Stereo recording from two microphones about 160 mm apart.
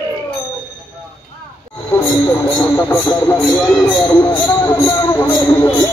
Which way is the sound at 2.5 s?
15° left (ahead or behind).